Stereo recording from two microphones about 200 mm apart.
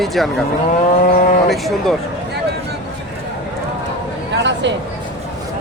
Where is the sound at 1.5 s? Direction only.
Centre (ahead or behind).